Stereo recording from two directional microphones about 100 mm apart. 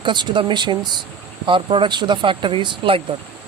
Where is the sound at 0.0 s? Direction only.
50° right (ahead or behind).